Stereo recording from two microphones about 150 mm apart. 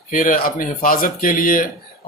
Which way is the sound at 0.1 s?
65° left (ahead or behind).